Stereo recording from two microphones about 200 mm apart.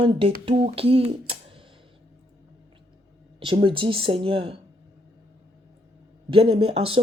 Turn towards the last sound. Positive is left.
turn(degrees=-30)  # may be behind; listen again after turning